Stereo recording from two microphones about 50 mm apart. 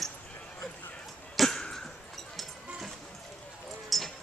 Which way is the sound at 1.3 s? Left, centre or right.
Centre.